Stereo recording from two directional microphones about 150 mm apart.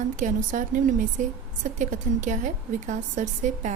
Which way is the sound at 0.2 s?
60° right (ahead or behind).